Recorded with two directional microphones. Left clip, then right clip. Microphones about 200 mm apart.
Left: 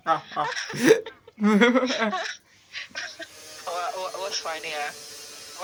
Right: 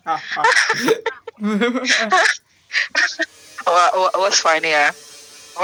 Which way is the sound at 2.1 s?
45° right (ahead or behind).